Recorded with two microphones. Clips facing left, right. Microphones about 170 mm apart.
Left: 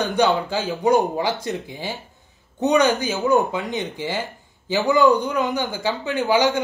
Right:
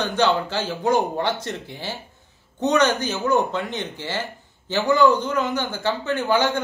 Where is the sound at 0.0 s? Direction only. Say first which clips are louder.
Left 1 dB; 15° left (ahead or behind).